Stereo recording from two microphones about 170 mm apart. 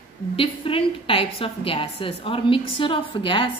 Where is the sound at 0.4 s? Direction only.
30° left (ahead or behind).